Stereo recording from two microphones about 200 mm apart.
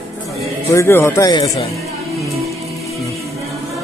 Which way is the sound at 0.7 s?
10° left (ahead or behind).